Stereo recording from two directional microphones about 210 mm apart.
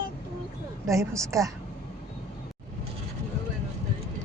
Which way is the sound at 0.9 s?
15° right (ahead or behind).